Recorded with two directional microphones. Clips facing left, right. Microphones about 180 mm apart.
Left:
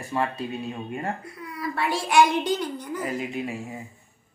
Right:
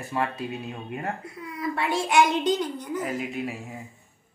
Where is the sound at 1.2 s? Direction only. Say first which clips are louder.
Right 1 dB; 20° right (ahead or behind).